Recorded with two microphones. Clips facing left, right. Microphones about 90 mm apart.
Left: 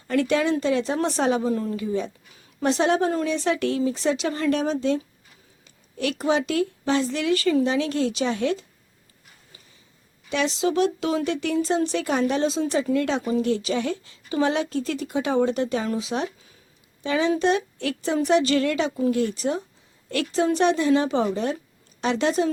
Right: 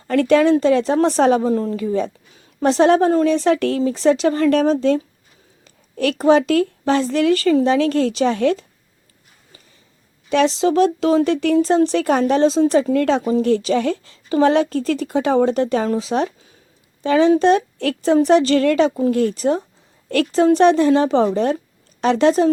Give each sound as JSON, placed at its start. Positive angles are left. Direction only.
{"t": 0.1, "sound": "a woman's voice", "side_deg": -50}
{"t": 10.2, "sound": "a woman's voice", "side_deg": -35}
{"t": 12.8, "sound": "a woman's voice", "side_deg": -50}